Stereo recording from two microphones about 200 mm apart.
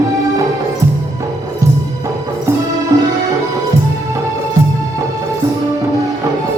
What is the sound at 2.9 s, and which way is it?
Music, 15° right (ahead or behind).